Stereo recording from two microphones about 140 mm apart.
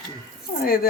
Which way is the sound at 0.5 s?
75° left (ahead or behind).